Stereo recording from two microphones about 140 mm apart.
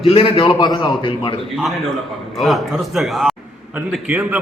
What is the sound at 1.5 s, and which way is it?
A man's voice, centre (ahead or behind).